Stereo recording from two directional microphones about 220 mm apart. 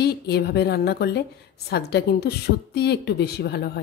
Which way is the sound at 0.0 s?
45° left (ahead or behind).